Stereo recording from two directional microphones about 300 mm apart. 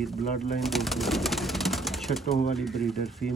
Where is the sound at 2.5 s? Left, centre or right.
Centre.